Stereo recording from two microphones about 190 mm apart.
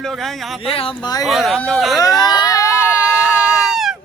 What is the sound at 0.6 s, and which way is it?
Speech, 30° left (ahead or behind).